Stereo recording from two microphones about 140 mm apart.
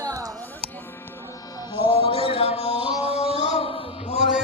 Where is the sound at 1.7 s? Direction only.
40° left (ahead or behind).